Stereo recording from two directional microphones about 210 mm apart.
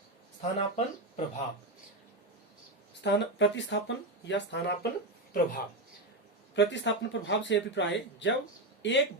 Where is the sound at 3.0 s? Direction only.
60° left (ahead or behind).